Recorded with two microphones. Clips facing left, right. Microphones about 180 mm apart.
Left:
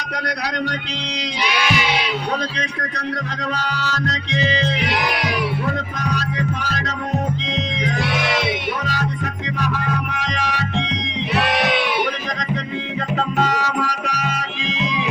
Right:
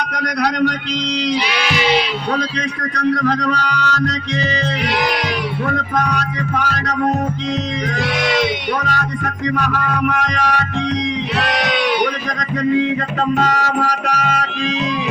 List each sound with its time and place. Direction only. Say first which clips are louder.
3.2 s music: right 8 dB; 65° right (ahead or behind)
3.8 s music: right 5 dB; 55° right (ahead or behind)
5.6 s music: right 4 dB; 60° right (ahead or behind)
8.9 s music: right 2 dB; 55° right (ahead or behind)
13.1 s music: right 1 dB; 55° right (ahead or behind)